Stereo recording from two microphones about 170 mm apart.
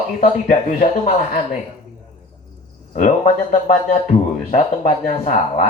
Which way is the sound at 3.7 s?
45° left (ahead or behind).